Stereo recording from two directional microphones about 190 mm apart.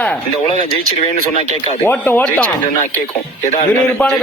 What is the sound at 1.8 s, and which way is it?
Speech, 10° left (ahead or behind).